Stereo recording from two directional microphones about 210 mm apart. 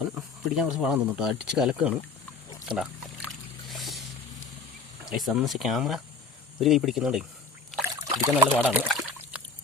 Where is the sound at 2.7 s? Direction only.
5° right (ahead or behind).